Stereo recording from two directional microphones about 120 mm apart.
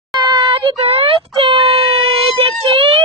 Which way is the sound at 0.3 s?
50° right (ahead or behind).